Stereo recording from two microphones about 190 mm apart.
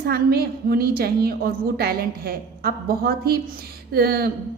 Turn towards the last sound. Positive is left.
turn(degrees=-55)  # may be behind; listen again after turning